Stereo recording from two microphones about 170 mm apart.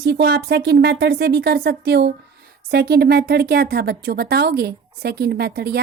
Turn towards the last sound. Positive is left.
turn(degrees=-70)  # may be behind; listen again after turning